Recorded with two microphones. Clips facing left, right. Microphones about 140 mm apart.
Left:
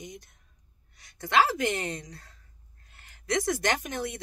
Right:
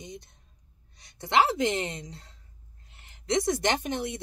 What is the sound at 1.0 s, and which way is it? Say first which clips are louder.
Speech: even; 25° right (ahead or behind).